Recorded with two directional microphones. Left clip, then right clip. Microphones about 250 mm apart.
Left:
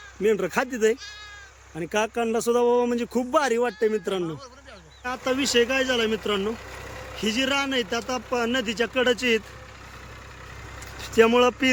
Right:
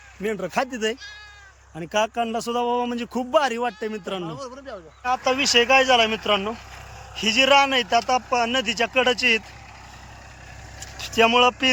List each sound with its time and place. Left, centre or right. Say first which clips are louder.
0.2 s speech: left 2 dB; centre
4.3 s speech: right 3 dB; right
5.0 s speech: right 5 dB; centre
10.9 s speech: right 1 dB; centre